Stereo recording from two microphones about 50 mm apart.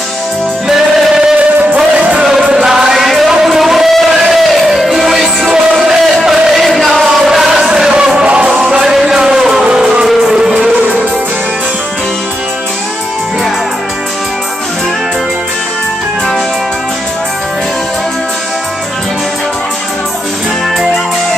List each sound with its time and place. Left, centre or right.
2.3 s music: centre
8.8 s music: centre
10.0 s vehicle: centre